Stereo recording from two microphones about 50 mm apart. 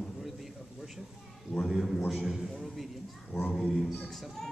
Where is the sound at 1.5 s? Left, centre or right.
Centre.